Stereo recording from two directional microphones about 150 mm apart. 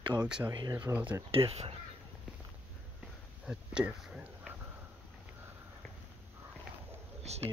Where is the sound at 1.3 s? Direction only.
40° right (ahead or behind).